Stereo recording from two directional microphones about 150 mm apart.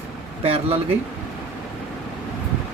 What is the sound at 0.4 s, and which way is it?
Speech, 40° right (ahead or behind).